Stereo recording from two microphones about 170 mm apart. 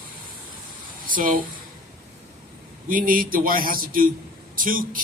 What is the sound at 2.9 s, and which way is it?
A man's voice, 55° right (ahead or behind).